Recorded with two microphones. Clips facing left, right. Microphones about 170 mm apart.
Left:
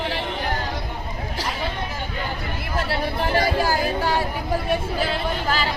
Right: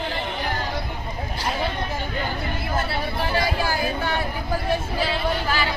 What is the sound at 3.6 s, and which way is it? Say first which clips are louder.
Chatter: left 3 dB; 35° left (ahead or behind).